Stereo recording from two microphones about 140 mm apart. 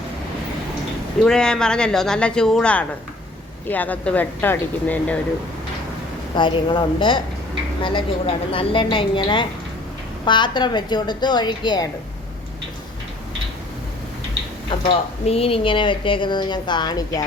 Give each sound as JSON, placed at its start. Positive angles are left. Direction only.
{"t": 1.2, "sound": "speech", "side_deg": 5}
{"t": 6.3, "sound": "speech", "side_deg": 35}
{"t": 14.7, "sound": "a sound", "side_deg": 35}
{"t": 15.2, "sound": "speech", "side_deg": 45}